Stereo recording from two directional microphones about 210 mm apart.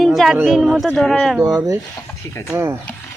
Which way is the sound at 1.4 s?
15° right (ahead or behind).